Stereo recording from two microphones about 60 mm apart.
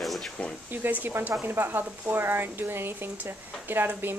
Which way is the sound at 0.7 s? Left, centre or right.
Right.